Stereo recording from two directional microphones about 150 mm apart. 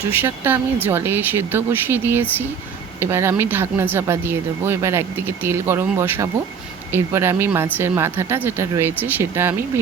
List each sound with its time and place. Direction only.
0.1 s speech: 15° right (ahead or behind)